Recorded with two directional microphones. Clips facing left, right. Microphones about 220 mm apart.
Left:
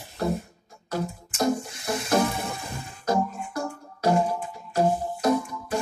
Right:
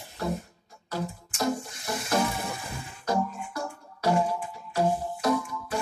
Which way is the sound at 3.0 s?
45° left (ahead or behind).